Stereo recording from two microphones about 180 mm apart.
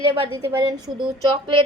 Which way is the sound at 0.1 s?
25° right (ahead or behind).